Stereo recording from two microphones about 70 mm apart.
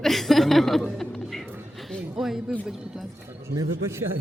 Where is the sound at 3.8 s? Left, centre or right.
Right.